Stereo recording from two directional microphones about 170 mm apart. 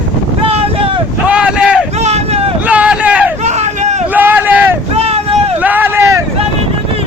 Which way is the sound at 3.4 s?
40° right (ahead or behind).